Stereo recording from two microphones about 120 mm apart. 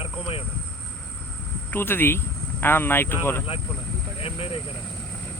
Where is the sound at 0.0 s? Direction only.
55° left (ahead or behind).